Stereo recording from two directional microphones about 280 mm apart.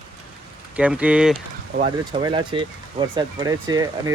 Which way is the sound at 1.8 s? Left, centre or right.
Centre.